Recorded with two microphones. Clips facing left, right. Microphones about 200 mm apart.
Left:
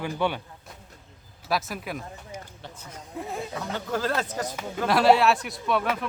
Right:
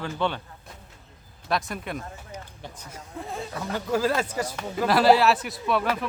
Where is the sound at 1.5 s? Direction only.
5° left (ahead or behind).